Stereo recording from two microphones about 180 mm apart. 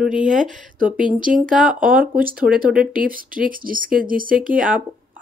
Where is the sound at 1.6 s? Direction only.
5° right (ahead or behind).